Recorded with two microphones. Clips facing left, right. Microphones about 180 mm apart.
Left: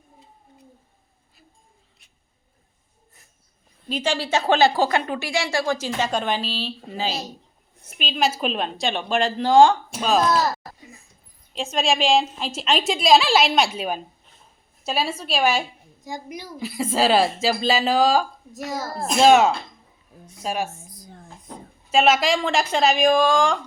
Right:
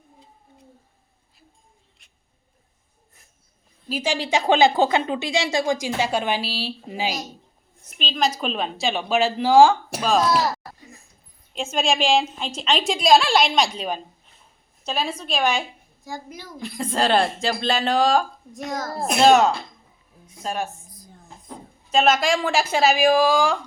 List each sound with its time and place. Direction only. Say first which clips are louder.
3.8 s a woman's voice: even; 10° right (ahead or behind)
7.9 s a woman's voice: even; 10° left (ahead or behind)
11.5 s a woman's voice: even; centre (ahead or behind)
20.9 s a sound: left 4 dB; 80° left
21.9 s a woman's voice: left 1 dB; 5° left (ahead or behind)